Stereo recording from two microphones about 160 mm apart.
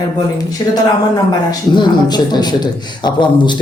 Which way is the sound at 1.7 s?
25° left (ahead or behind).